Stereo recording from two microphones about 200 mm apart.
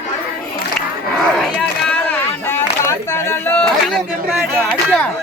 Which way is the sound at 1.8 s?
10° left (ahead or behind).